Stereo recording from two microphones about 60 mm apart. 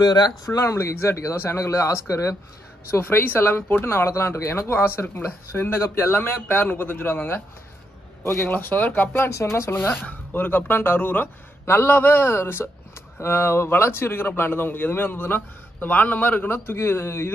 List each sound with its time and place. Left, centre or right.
0.5 s speech: left
8.5 s speech: left
9.3 s speech: left
9.8 s speech: left
16.4 s speech: left